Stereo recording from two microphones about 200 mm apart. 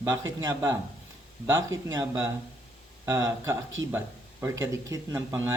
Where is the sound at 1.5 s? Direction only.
15° right (ahead or behind).